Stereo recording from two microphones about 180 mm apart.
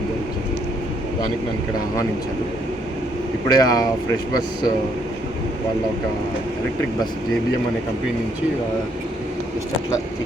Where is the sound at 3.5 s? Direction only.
20° left (ahead or behind).